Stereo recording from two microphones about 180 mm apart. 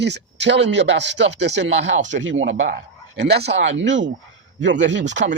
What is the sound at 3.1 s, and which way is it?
Speech, 70° right (ahead or behind).